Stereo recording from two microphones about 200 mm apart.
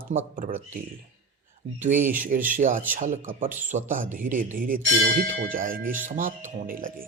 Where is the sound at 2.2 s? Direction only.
45° right (ahead or behind).